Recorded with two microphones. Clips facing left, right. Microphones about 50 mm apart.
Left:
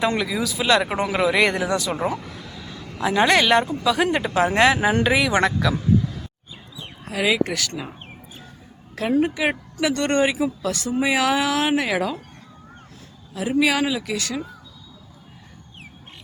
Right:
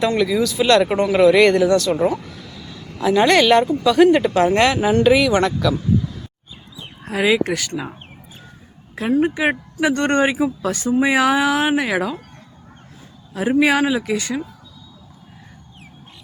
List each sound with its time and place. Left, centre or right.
0.2 s speech: centre
7.1 s speech: centre
9.0 s a woman's voice: centre
9.3 s speech: centre
13.3 s speech: right